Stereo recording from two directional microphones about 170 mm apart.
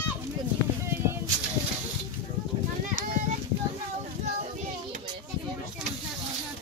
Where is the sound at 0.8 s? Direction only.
15° right (ahead or behind).